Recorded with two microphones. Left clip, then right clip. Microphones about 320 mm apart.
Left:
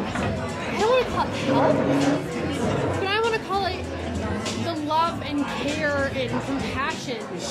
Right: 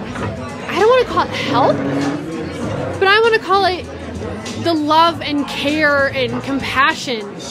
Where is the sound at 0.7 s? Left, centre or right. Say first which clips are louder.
Right 9 dB; right.